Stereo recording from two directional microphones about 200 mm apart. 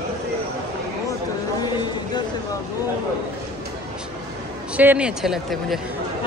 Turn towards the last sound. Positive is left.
turn(degrees=0)  # may be behind; listen again after turning